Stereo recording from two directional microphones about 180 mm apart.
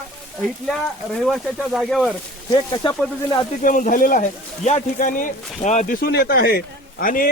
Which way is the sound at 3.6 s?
50° left (ahead or behind).